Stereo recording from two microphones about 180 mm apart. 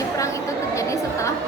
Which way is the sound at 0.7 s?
15° left (ahead or behind).